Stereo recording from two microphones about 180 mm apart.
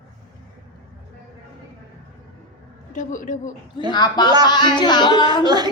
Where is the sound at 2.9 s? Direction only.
45° left (ahead or behind).